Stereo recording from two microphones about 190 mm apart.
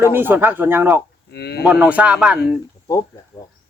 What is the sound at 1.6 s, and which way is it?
Speech, 5° right (ahead or behind).